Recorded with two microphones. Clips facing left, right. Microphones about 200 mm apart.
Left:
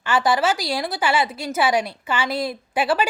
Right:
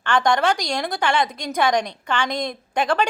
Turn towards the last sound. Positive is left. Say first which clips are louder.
# even
turn(degrees=5)  # may be behind; listen again after turning